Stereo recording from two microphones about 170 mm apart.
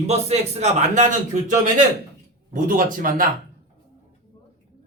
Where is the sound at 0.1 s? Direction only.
40° right (ahead or behind); by 3.2 s 55° right (ahead or behind).